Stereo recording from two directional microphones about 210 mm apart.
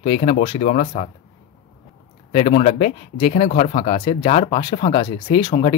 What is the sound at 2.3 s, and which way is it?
Speech, 30° left (ahead or behind).